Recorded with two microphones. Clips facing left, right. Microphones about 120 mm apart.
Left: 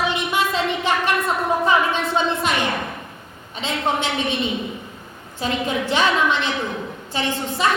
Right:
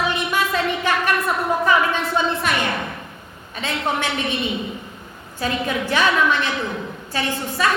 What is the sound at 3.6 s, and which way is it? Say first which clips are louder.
Speech: left 1 dB; 20° left (ahead or behind).